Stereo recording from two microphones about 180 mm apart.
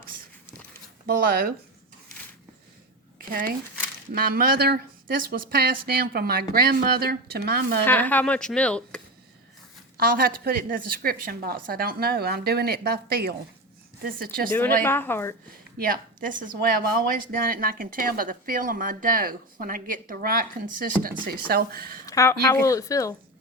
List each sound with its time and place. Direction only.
1.0 s a woman's voice: 55° right (ahead or behind)
3.2 s a sound: 50° right (ahead or behind)
4.1 s a woman's voice: 55° right (ahead or behind)
7.9 s speech: 10° left (ahead or behind)
10.0 s a woman's voice: 55° right (ahead or behind)
14.8 s speech: 10° left (ahead or behind)
15.8 s a woman's voice: 50° right (ahead or behind)
22.0 s speech: 15° left (ahead or behind)